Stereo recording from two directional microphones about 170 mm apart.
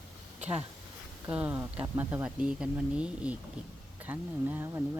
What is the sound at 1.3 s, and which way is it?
Speech, 10° right (ahead or behind).